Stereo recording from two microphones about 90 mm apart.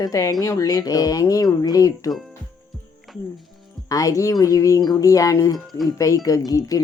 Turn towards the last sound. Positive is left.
turn(degrees=40)  # may be behind; listen again after turning